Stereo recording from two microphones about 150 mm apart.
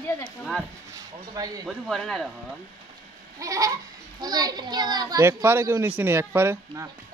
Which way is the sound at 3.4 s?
20° right (ahead or behind).